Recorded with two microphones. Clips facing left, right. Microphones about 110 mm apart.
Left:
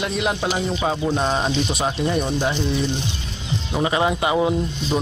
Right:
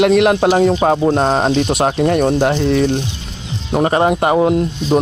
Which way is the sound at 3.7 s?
45° right (ahead or behind).